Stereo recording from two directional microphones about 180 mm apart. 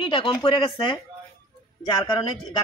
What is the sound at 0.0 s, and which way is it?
Speech, 25° left (ahead or behind).